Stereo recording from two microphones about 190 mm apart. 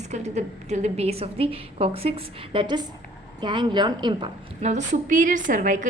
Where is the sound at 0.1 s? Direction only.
35° right (ahead or behind).